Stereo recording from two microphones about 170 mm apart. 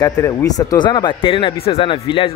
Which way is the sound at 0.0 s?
20° left (ahead or behind).